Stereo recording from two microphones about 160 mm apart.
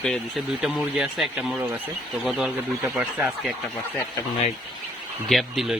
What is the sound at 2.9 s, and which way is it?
Speech, 5° right (ahead or behind).